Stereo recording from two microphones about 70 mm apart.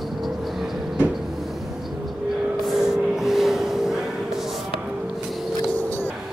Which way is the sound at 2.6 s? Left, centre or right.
Centre.